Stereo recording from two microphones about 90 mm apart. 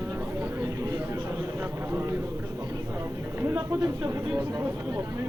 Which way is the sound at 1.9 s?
30° right (ahead or behind).